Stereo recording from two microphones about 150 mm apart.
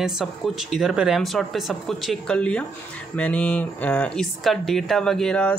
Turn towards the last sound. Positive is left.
turn(degrees=5)  # may be behind; listen again after turning